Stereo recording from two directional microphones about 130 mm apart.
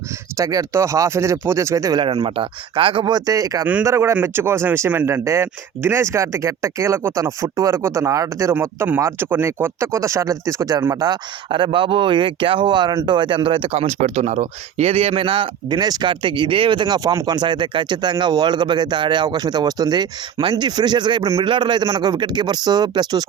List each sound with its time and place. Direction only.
0.3 s speech: 25° right (ahead or behind)